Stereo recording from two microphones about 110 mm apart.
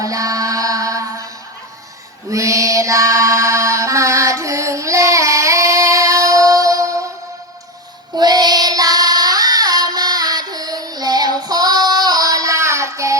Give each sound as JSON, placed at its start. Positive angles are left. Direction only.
{"t": 0.0, "sound": "music", "side_deg": -30}
{"t": 2.3, "sound": "mantra", "side_deg": -30}
{"t": 8.1, "sound": "child singing", "side_deg": -40}